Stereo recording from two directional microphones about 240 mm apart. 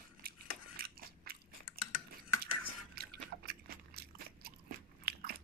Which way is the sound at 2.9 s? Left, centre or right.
Right.